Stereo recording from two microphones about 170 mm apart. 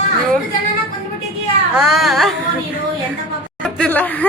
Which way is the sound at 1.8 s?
Centre (ahead or behind).